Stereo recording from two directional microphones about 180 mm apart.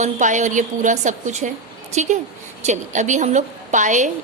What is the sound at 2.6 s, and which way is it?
A woman's voice, 40° right (ahead or behind).